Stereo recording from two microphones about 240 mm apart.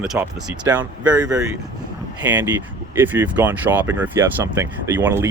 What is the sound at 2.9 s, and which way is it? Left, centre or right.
Speech, centre.